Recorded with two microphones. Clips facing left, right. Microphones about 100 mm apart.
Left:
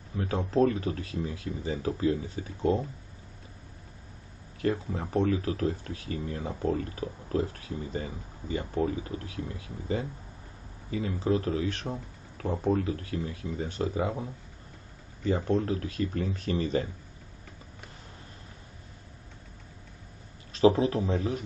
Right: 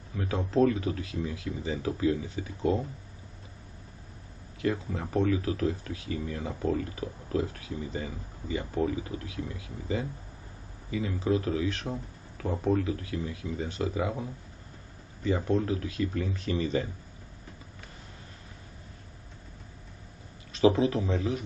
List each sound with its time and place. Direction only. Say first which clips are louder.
0.1 s speech: even; 35° left (ahead or behind)
4.6 s speech: left 1 dB; 35° left (ahead or behind)
15.2 s speech: even; 40° left (ahead or behind)
20.5 s speech: left 1 dB; 35° left (ahead or behind)